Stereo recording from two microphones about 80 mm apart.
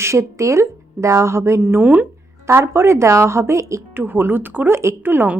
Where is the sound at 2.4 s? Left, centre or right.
Right.